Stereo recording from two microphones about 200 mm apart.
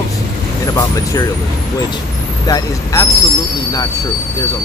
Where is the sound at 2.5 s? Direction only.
15° left (ahead or behind).